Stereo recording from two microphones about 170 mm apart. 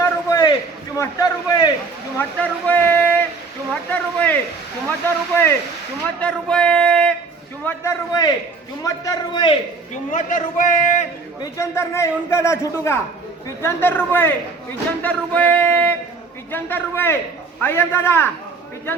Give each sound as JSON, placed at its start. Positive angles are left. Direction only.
{"t": 0.0, "sound": "a sound", "side_deg": 20}
{"t": 0.9, "sound": "a man's voice", "side_deg": 20}
{"t": 2.1, "sound": "a man's voice", "side_deg": 10}
{"t": 7.6, "sound": "a man's voice", "side_deg": 15}
{"t": 10.1, "sound": "a man's voice", "side_deg": 50}
{"t": 11.5, "sound": "a man's voice", "side_deg": 15}